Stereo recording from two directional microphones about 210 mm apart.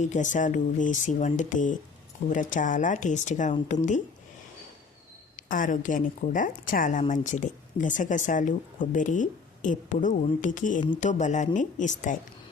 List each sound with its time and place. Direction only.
0.0 s a woman's voice: 35° left (ahead or behind)
5.4 s a woman's voice: 40° left (ahead or behind)